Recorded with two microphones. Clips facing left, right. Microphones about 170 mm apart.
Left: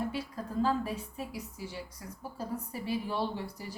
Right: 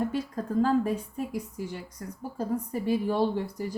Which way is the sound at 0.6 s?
50° right (ahead or behind).